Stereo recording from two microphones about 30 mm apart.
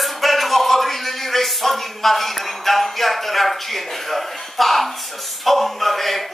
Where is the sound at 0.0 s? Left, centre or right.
Centre.